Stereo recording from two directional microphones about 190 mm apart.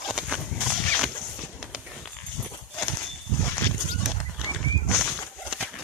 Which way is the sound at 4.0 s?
5° right (ahead or behind).